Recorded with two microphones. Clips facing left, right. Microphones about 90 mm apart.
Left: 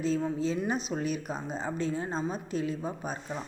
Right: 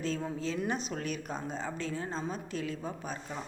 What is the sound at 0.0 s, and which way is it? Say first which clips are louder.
Speech: left 5 dB; 15° left (ahead or behind).